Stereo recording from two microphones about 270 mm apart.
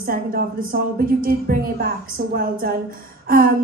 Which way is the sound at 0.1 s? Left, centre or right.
Right.